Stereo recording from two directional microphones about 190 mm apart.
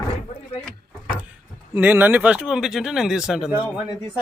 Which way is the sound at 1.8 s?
10° right (ahead or behind).